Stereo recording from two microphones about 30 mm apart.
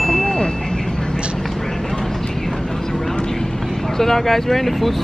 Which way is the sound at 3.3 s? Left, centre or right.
Centre.